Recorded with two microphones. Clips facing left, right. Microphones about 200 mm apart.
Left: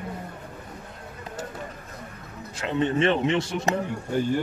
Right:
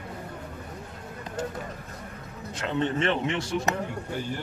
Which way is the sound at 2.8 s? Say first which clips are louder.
Left 4 dB; 20° left (ahead or behind).